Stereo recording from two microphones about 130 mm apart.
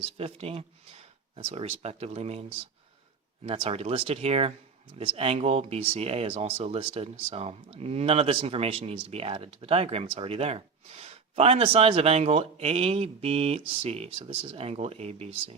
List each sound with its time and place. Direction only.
0.0 s speech: 50° right (ahead or behind)